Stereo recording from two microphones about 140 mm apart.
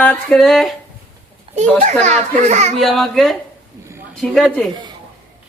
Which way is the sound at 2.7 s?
Centre (ahead or behind).